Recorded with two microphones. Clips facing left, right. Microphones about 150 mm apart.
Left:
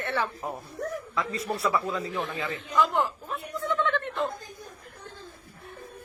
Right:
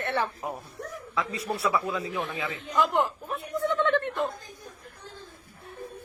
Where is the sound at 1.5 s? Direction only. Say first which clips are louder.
Even; 10° right (ahead or behind).